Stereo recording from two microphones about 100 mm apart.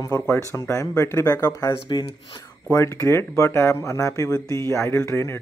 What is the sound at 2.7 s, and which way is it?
Speech, 30° left (ahead or behind).